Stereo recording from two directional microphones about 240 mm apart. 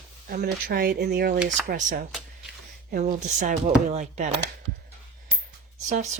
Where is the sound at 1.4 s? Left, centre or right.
Centre.